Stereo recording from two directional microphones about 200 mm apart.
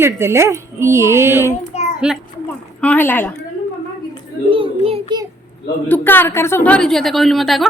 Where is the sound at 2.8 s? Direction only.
10° left (ahead or behind).